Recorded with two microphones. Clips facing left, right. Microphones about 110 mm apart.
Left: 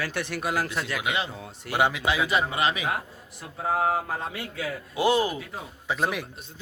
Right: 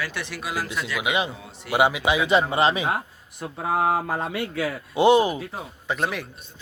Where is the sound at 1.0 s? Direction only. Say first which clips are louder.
Right 4 dB; 15° right (ahead or behind).